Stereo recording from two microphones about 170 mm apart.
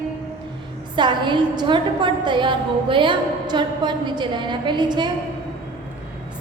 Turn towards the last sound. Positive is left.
turn(degrees=-25)  # may be behind; listen again after turning